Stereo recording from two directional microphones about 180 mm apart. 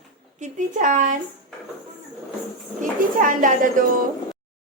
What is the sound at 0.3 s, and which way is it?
Speech, 45° right (ahead or behind).